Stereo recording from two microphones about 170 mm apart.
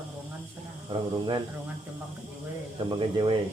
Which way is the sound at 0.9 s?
25° right (ahead or behind).